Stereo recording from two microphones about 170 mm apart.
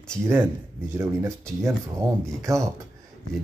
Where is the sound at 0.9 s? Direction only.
15° right (ahead or behind).